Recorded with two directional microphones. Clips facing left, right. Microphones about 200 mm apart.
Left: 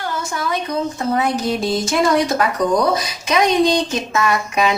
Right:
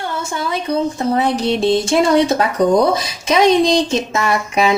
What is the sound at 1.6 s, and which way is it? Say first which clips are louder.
A woman's voice: right 5 dB; 30° right (ahead or behind).